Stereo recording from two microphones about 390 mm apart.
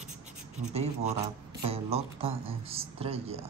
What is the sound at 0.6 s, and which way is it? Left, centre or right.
Speech, centre.